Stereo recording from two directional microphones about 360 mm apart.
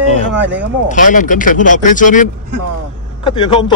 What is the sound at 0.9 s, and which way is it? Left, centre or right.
A man's voice, left.